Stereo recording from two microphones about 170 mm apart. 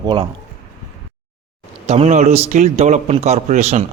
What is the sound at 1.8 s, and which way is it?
A man's voice, 40° right (ahead or behind).